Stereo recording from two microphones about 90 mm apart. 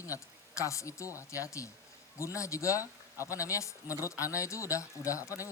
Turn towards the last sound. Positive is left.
turn(degrees=35)  # may be behind; listen again after turning